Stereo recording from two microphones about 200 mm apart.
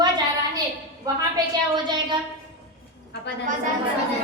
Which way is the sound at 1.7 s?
20° right (ahead or behind).